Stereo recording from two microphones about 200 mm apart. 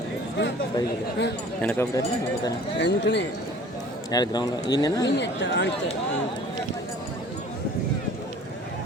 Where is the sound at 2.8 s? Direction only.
60° left (ahead or behind).